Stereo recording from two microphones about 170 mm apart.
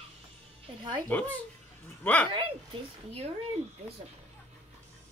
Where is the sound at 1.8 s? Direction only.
10° left (ahead or behind).